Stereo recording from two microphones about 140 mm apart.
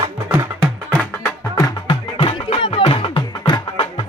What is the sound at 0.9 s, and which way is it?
Music, 20° left (ahead or behind).